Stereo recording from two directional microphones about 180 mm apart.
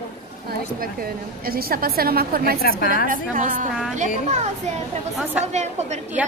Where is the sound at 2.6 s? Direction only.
55° left (ahead or behind).